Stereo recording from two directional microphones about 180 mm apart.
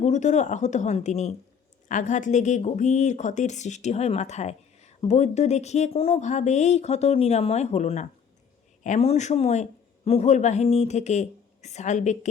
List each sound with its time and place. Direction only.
0.0 s speech: 40° left (ahead or behind)